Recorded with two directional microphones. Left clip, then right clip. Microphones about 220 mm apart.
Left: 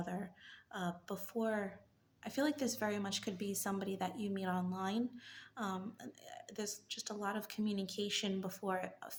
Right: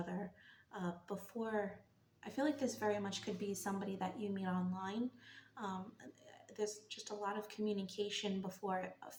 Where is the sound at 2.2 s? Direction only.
55° left (ahead or behind).